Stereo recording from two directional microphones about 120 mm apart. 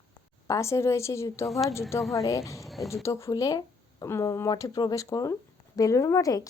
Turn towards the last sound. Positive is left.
turn(degrees=25)  # may be behind; listen again after turning